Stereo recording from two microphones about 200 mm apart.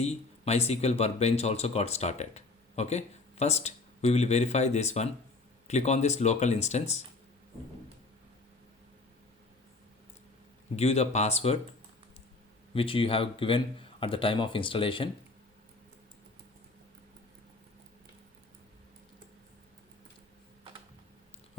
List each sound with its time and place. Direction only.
0.0 s speech: 30° left (ahead or behind)
10.8 s speech: 30° left (ahead or behind)
12.7 s speech: 25° left (ahead or behind)